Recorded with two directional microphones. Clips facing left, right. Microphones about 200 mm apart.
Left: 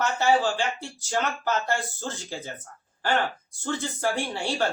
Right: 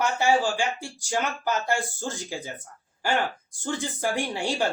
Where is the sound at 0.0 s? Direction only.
10° right (ahead or behind).